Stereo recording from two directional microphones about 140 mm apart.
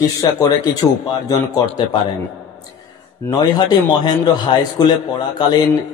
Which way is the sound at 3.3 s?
30° left (ahead or behind).